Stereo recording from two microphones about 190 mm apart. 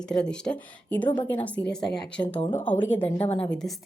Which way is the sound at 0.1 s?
5° left (ahead or behind).